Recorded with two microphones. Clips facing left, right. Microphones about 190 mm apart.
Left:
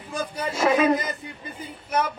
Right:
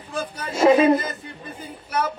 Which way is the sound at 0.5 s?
30° right (ahead or behind).